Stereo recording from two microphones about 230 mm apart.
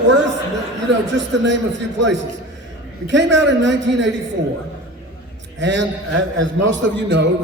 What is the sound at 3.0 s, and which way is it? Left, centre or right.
A man's voice, right.